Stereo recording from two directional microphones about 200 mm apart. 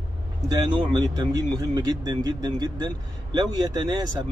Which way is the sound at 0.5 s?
20° right (ahead or behind).